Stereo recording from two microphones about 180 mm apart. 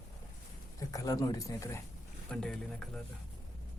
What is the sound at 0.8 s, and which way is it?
Speech, 20° left (ahead or behind).